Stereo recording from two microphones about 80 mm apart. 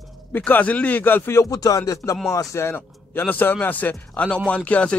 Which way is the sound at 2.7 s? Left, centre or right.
Left.